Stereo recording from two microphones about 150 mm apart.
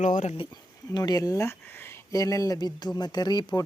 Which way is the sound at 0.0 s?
55° left (ahead or behind).